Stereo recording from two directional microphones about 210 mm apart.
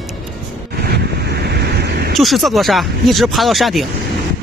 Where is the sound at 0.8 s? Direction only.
50° right (ahead or behind).